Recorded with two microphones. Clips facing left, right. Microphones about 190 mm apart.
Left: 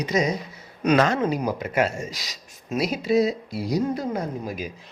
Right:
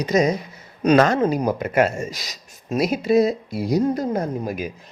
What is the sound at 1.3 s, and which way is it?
Speech, 50° right (ahead or behind).